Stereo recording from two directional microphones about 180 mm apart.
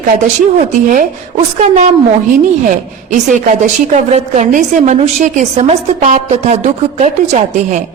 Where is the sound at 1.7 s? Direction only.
40° right (ahead or behind).